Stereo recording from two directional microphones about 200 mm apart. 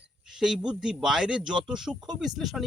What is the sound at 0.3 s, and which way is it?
Speech, centre (ahead or behind).